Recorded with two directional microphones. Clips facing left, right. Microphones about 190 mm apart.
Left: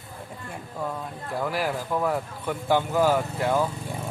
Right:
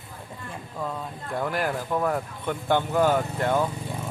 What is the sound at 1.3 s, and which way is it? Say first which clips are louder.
Speech: even; 5° left (ahead or behind).